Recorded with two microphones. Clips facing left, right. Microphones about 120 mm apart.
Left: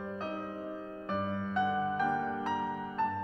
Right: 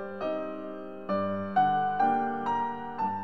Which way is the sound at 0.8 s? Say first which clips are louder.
Right 2 dB; 25° right (ahead or behind).